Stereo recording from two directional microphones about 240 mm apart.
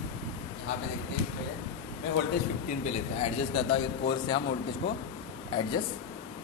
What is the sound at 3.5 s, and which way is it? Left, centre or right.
Speech, left.